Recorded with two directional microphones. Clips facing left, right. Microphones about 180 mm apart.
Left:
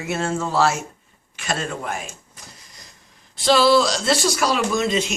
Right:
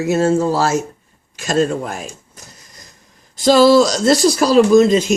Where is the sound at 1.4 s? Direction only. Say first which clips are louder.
Right 10 dB; 40° right (ahead or behind).